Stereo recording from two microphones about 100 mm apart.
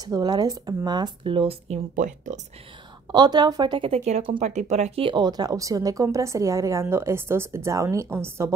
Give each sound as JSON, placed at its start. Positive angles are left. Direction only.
{"t": 0.0, "sound": "speech", "side_deg": -40}
{"t": 1.2, "sound": "speech", "side_deg": -70}
{"t": 3.1, "sound": "speech", "side_deg": -45}
{"t": 3.9, "sound": "speech", "side_deg": -75}
{"t": 5.1, "sound": "a woman's voice", "side_deg": -45}